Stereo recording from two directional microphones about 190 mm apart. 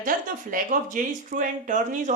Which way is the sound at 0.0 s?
45° right (ahead or behind).